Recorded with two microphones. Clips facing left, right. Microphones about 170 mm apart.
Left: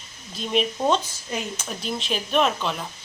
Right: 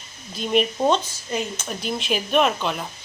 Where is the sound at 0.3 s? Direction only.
5° right (ahead or behind).